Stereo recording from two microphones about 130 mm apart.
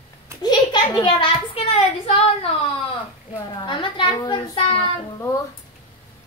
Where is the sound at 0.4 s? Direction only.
30° left (ahead or behind); by 2.2 s 50° left (ahead or behind).